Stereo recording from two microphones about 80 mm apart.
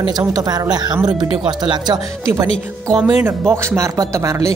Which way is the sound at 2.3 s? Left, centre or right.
Right.